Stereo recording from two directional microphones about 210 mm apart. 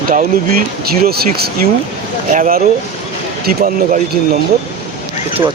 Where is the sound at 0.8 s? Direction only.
45° right (ahead or behind).